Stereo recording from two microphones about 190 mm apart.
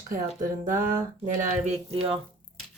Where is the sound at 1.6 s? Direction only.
30° right (ahead or behind).